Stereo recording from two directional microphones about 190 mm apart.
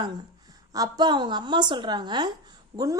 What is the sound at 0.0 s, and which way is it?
A woman's voice, 20° right (ahead or behind).